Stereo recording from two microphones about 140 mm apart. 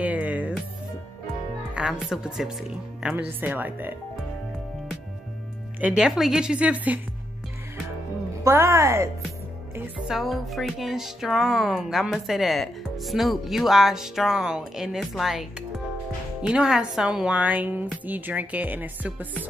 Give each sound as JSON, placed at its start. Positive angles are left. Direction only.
{"t": 0.0, "sound": "music", "side_deg": -10}
{"t": 1.7, "sound": "music", "side_deg": -5}
{"t": 3.0, "sound": "a woman's voice", "side_deg": -10}
{"t": 5.8, "sound": "a woman's voice", "side_deg": -10}
{"t": 8.5, "sound": "speech", "side_deg": -20}
{"t": 9.8, "sound": "music", "side_deg": -5}
{"t": 16.4, "sound": "a woman's voice", "side_deg": -5}